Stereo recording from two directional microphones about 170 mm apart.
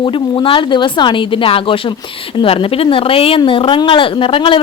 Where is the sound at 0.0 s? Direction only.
30° left (ahead or behind).